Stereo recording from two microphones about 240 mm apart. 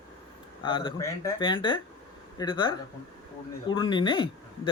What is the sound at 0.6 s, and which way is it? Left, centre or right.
Speech, left.